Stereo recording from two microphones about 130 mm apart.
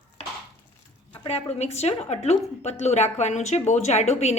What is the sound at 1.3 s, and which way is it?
A woman's voice, 55° left (ahead or behind).